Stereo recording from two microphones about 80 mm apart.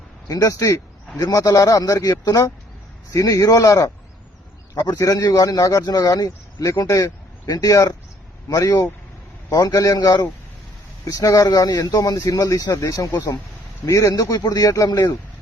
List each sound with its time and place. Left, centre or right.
0.3 s speech: left